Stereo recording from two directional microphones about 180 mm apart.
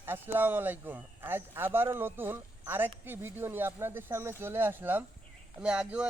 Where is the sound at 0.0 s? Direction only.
10° right (ahead or behind).